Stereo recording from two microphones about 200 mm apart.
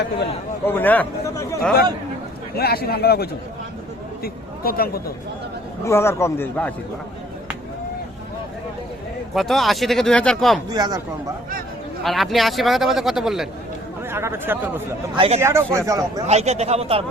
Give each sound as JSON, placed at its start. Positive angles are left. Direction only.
{"t": 0.6, "sound": "a man's voice", "side_deg": 10}
{"t": 2.6, "sound": "a man's voice", "side_deg": 50}
{"t": 5.8, "sound": "a man's voice", "side_deg": 15}
{"t": 9.3, "sound": "a man's voice", "side_deg": 0}
{"t": 10.7, "sound": "speech", "side_deg": -20}
{"t": 12.0, "sound": "a man's voice", "side_deg": 0}
{"t": 14.1, "sound": "speech", "side_deg": -10}
{"t": 15.1, "sound": "speech", "side_deg": -25}
{"t": 15.4, "sound": "speech", "side_deg": -15}
{"t": 16.2, "sound": "a man's voice", "side_deg": -35}